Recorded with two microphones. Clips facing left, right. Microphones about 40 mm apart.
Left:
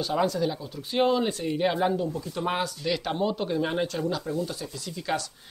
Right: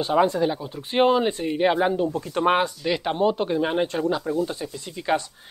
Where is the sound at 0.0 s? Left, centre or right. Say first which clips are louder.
Right 5 dB; right.